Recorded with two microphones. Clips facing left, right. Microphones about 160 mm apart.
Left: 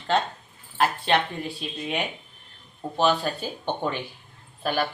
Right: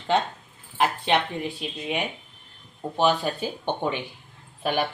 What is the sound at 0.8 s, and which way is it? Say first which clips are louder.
Speech: even; 15° right (ahead or behind).